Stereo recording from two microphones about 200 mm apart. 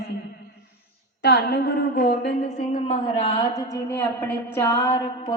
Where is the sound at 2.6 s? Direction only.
30° left (ahead or behind).